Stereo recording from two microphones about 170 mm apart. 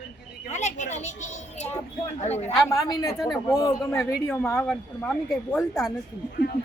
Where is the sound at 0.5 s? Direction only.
45° left (ahead or behind).